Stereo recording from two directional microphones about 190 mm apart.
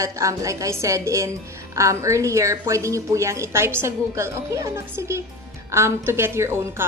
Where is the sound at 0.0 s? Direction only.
15° right (ahead or behind).